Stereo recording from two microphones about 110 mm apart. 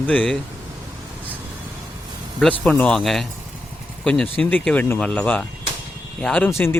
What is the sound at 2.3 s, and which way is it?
Speech, 10° left (ahead or behind).